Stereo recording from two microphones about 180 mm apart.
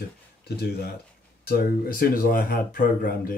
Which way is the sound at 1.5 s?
55° left (ahead or behind).